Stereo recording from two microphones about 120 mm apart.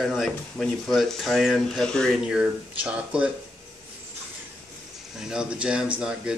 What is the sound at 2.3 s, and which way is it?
Speech, 10° right (ahead or behind).